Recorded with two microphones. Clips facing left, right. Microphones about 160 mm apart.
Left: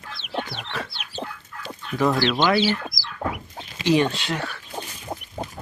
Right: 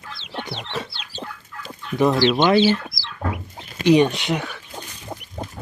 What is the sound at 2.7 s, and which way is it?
Chicken, 25° right (ahead or behind).